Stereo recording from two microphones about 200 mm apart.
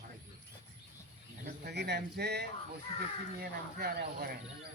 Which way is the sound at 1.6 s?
55° right (ahead or behind).